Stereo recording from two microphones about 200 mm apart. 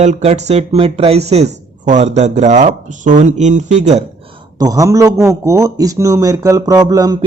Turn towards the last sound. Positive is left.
turn(degrees=-20)  # may be behind; listen again after turning